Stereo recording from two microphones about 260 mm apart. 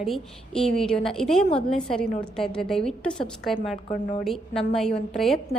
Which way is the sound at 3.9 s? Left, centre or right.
Left.